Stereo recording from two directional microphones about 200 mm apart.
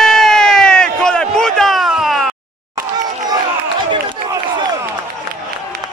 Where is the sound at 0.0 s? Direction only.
Centre (ahead or behind).